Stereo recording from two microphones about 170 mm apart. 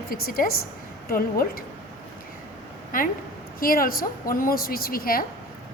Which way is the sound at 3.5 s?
60° left (ahead or behind).